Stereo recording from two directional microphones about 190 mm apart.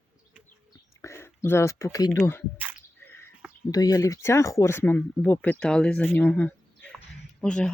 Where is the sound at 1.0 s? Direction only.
15° left (ahead or behind).